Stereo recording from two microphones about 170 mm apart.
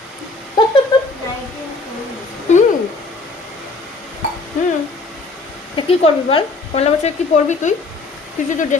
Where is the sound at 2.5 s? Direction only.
45° left (ahead or behind).